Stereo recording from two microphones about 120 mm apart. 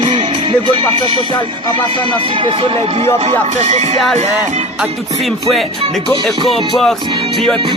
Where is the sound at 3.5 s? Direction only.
70° right (ahead or behind).